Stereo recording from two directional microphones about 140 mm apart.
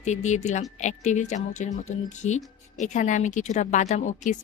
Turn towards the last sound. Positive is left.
turn(degrees=60)  # may be behind; listen again after turning